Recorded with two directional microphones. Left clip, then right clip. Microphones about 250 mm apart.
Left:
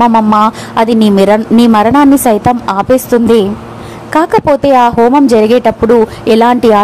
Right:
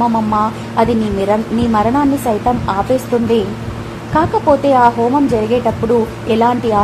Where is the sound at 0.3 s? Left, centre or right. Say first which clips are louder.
Left 7 dB; left.